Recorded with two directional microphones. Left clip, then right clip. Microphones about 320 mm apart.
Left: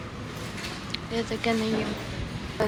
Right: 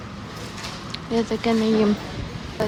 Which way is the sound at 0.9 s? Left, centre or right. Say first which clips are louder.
Right 7 dB; centre.